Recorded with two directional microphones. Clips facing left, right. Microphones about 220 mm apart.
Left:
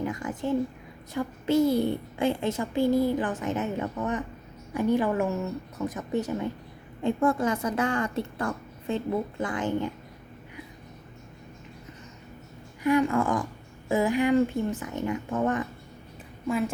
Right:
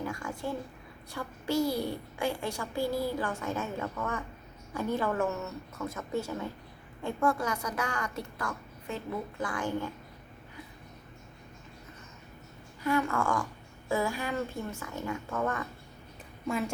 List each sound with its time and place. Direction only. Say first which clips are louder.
0.0 s a child's voice: left 5 dB; 20° left (ahead or behind)
12.8 s a child's voice: left 6 dB; 15° left (ahead or behind)
16.5 s a woman's voice: left 5 dB; centre (ahead or behind)